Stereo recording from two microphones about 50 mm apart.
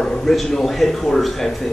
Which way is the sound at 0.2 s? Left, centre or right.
Centre.